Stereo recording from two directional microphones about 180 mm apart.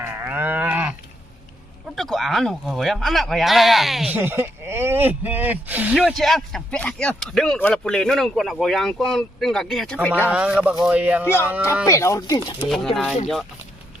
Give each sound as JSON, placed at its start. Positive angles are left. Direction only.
{"t": 0.0, "sound": "livestock", "side_deg": -10}
{"t": 2.0, "sound": "speech", "side_deg": 0}
{"t": 11.9, "sound": "speech", "side_deg": 15}
{"t": 12.5, "sound": "speech", "side_deg": 0}